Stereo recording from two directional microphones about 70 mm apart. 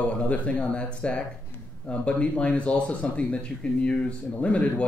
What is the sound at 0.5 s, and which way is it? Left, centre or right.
Speech, centre.